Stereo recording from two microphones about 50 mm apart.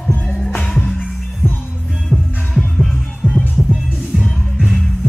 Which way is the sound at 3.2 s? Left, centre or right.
Centre.